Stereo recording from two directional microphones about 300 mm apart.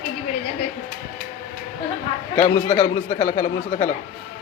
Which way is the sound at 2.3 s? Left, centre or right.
Left.